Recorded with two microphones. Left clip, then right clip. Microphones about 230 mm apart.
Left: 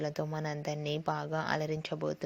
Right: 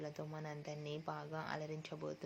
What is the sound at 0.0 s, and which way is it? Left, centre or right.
A woman's voice, left.